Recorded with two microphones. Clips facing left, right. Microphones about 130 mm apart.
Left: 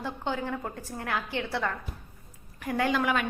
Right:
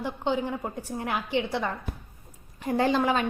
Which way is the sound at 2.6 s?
30° right (ahead or behind).